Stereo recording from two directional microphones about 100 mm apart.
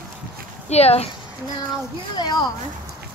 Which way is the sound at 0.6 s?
90° left.